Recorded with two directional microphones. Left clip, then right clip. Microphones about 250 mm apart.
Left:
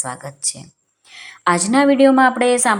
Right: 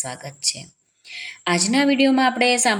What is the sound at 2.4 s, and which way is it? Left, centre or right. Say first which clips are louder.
Speech: left 3 dB; left.